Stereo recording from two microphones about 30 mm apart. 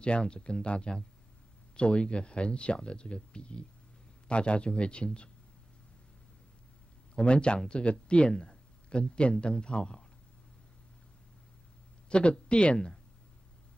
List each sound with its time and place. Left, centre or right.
0.3 s speech: left
7.2 s speech: left
8.3 s speech: left
12.1 s speech: left